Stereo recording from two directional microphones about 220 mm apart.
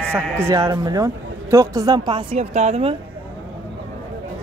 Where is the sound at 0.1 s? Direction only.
10° right (ahead or behind); by 3.0 s 25° right (ahead or behind).